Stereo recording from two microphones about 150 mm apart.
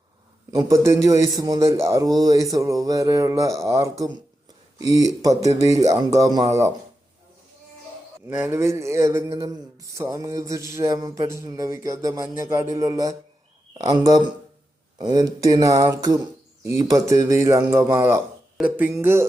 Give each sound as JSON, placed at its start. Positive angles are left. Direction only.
{"t": 0.5, "sound": "a man's voice", "side_deg": -20}
{"t": 8.3, "sound": "a man's voice", "side_deg": -15}
{"t": 18.9, "sound": "music", "side_deg": -15}